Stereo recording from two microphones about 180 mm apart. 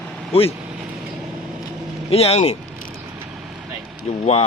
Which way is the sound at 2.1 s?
35° left (ahead or behind).